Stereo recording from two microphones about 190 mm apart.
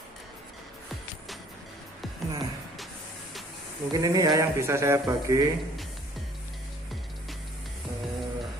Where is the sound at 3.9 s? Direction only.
20° right (ahead or behind).